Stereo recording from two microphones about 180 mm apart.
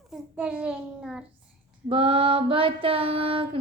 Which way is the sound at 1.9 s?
30° right (ahead or behind).